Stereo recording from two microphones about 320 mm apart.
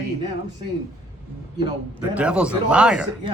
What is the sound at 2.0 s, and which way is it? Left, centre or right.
Speech, centre.